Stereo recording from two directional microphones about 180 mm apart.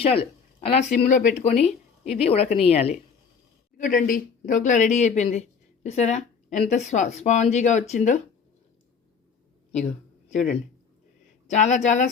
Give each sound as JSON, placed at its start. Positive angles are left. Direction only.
{"t": 0.0, "sound": "a woman's voice", "side_deg": 30}
{"t": 3.8, "sound": "speech", "side_deg": 45}
{"t": 11.4, "sound": "speech", "side_deg": 40}